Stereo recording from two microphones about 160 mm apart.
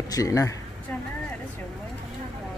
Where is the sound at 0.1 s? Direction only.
20° left (ahead or behind).